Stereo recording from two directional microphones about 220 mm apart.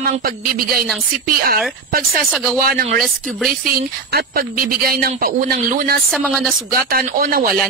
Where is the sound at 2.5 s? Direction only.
40° right (ahead or behind).